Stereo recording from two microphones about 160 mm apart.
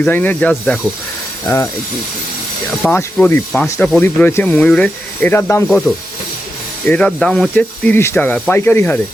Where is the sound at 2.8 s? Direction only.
10° left (ahead or behind).